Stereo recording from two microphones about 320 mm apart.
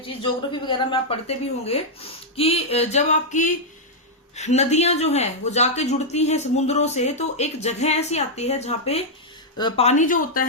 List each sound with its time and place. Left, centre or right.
0.0 s a woman's voice: centre